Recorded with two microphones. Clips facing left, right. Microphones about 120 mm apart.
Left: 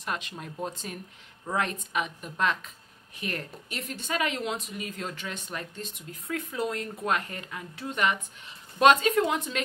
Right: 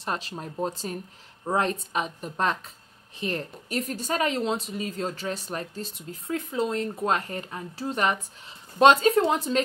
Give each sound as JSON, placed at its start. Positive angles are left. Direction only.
{"t": 0.0, "sound": "a woman's voice", "side_deg": -35}